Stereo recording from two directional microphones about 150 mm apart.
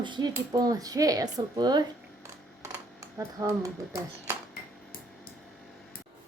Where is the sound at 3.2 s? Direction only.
25° right (ahead or behind).